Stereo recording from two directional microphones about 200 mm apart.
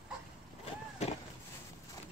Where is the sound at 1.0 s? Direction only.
35° left (ahead or behind).